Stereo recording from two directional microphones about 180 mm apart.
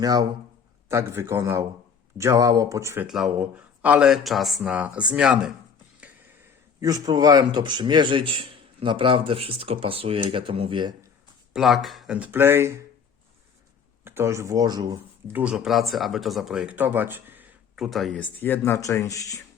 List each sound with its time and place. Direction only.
0.0 s speech: 20° right (ahead or behind)
3.1 s speech: 5° right (ahead or behind)
6.7 s speech: 20° right (ahead or behind)
11.5 s speech: centre (ahead or behind)
14.0 s speech: 15° right (ahead or behind)
15.3 s speech: 10° right (ahead or behind); by 19.4 s 20° left (ahead or behind)